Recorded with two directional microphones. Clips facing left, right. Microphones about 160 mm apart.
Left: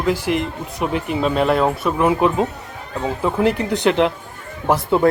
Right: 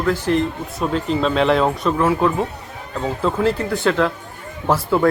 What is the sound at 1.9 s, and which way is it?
Speech, 20° left (ahead or behind).